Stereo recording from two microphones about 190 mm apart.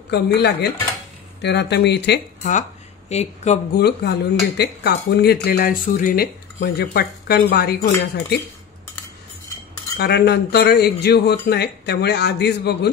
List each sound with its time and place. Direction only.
0.1 s speech: 60° left (ahead or behind)
3.1 s speech: 35° left (ahead or behind)
3.7 s speech: 60° left (ahead or behind)
9.9 s speech: 60° left (ahead or behind)